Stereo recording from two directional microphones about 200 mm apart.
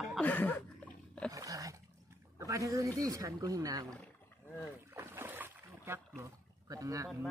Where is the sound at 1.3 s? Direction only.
15° right (ahead or behind).